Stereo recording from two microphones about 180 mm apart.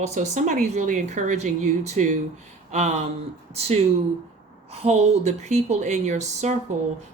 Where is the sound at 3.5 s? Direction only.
35° right (ahead or behind).